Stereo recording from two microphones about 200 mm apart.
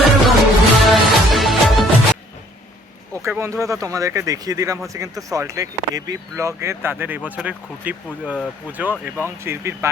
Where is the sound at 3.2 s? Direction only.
15° right (ahead or behind).